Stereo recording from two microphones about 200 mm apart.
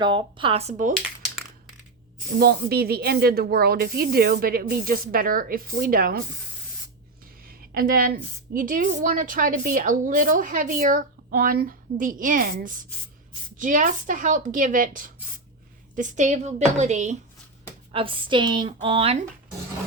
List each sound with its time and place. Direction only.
0.0 s speech: 25° right (ahead or behind)
2.4 s a woman's voice: 50° right (ahead or behind)
7.4 s a woman's voice: 45° right (ahead or behind); by 19.2 s 30° right (ahead or behind)